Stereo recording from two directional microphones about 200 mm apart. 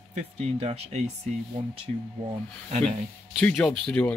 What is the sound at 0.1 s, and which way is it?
Speech, 30° right (ahead or behind).